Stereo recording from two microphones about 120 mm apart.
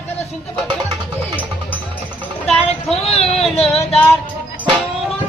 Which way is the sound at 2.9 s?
55° left (ahead or behind).